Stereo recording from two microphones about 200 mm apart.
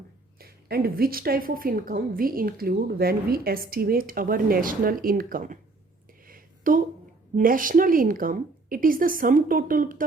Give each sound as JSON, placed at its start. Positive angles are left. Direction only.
{"t": 0.3, "sound": "a woman's voice", "side_deg": -50}
{"t": 6.2, "sound": "a sound", "side_deg": -45}
{"t": 7.3, "sound": "a woman's voice", "side_deg": -45}